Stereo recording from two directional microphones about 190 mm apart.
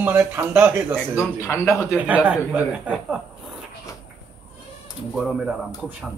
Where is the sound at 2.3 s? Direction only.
5° right (ahead or behind).